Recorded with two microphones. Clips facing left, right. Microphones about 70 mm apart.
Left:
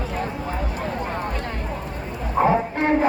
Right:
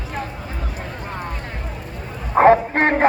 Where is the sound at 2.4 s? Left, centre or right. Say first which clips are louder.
Right 6 dB; right.